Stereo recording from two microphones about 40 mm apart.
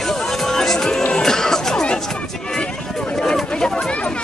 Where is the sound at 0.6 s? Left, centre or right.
Centre.